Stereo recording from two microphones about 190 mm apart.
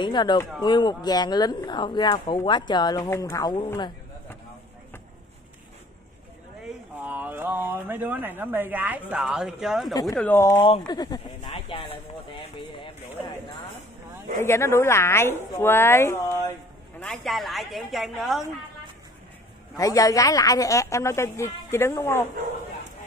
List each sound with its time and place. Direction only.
0.0 s speech: 25° left (ahead or behind)
3.7 s a sound: 20° left (ahead or behind)
6.6 s speech: 10° right (ahead or behind)
10.1 s a woman's voice: 10° left (ahead or behind)
10.5 s speech: 25° left (ahead or behind)
14.4 s a woman's voice: 15° left (ahead or behind)
17.0 s a woman's voice: 5° left (ahead or behind)
19.8 s a woman's voice: 15° left (ahead or behind)